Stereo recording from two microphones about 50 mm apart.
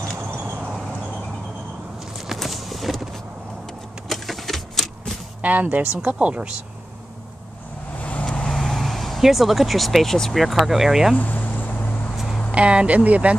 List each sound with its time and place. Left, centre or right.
2.1 s a sound: centre
4.1 s typewriter: centre
5.4 s speech: right
8.0 s vehicle: left
8.5 s vehicle: centre
9.2 s speech: centre
10.3 s speech: centre
11.1 s a sound: left
12.4 s speech: right